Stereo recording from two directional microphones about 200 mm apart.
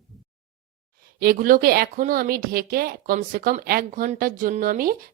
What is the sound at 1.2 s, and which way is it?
Speech, 45° right (ahead or behind).